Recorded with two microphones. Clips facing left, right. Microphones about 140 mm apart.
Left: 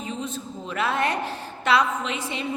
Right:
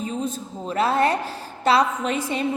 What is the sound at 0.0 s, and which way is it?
A woman's voice, 40° right (ahead or behind).